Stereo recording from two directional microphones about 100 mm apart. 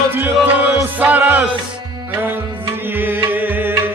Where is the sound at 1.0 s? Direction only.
20° right (ahead or behind).